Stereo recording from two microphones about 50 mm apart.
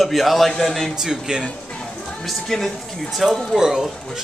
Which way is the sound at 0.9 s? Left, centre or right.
Centre.